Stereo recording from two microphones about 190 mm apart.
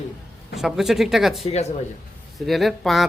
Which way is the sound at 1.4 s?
35° left (ahead or behind).